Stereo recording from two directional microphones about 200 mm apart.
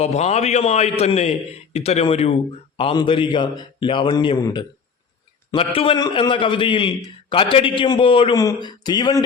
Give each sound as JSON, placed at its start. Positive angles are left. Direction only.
{"t": 0.0, "sound": "a man's voice", "side_deg": 35}